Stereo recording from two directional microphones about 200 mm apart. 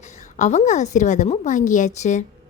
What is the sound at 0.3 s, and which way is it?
A woman's voice, 35° left (ahead or behind).